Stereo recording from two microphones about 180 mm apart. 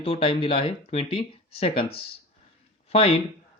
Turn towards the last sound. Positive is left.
turn(degrees=35)  # may be behind; listen again after turning